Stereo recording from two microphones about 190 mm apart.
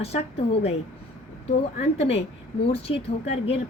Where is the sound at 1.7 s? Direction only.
30° left (ahead or behind).